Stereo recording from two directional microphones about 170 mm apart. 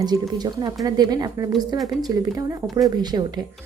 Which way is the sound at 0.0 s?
25° right (ahead or behind).